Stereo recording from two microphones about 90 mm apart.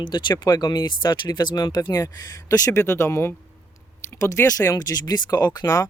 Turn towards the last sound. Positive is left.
turn(degrees=35)  # may be behind; listen again after turning